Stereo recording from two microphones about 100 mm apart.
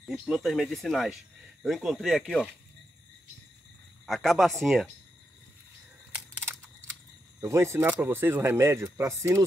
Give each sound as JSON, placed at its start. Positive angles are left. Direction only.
{"t": 0.2, "sound": "speech", "side_deg": -5}
{"t": 4.0, "sound": "speech", "side_deg": 5}
{"t": 6.1, "sound": "a sound", "side_deg": -20}
{"t": 7.3, "sound": "speech", "side_deg": -30}